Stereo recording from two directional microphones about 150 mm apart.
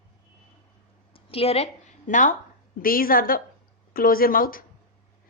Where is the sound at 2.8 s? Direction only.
70° left (ahead or behind).